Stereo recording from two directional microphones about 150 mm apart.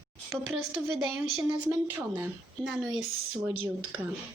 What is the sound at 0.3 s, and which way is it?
Speech, centre (ahead or behind).